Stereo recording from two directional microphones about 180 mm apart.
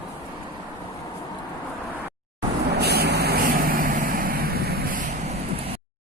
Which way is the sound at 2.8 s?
65° right (ahead or behind).